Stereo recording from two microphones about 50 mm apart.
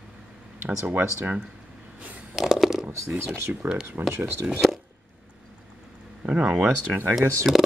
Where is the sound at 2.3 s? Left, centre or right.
Centre.